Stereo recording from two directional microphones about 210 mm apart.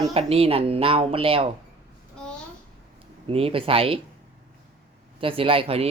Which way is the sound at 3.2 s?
25° right (ahead or behind).